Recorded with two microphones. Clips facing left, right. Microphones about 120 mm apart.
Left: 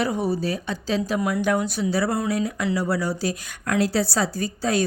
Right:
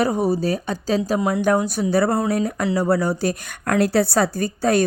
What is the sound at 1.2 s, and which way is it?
Speech, 25° right (ahead or behind).